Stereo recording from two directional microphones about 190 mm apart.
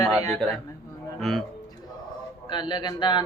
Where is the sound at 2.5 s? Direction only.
25° left (ahead or behind).